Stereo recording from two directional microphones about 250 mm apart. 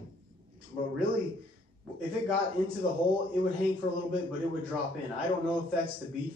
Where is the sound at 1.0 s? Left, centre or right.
Right.